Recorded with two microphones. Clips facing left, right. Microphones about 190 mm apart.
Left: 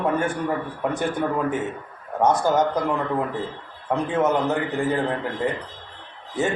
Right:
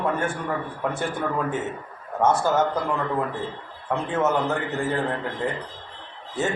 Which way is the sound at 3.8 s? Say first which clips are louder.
Left 2 dB; 15° left (ahead or behind).